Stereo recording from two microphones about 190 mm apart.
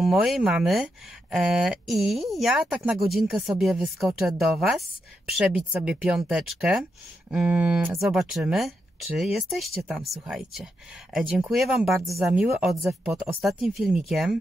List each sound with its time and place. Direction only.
0.0 s speech: centre (ahead or behind)